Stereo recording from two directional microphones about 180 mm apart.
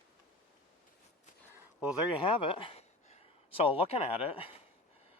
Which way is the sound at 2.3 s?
30° left (ahead or behind).